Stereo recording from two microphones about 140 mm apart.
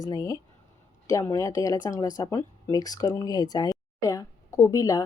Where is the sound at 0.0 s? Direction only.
25° left (ahead or behind).